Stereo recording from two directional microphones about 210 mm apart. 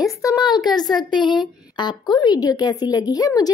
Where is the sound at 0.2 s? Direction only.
20° left (ahead or behind).